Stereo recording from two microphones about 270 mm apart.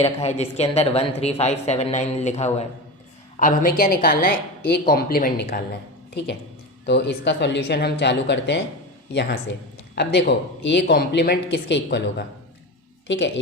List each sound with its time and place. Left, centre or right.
0.0 s speech: left
6.8 s speech: left
9.9 s speech: left